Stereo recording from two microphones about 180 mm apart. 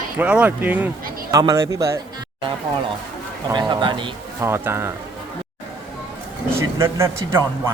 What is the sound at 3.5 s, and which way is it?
Speech, 25° right (ahead or behind).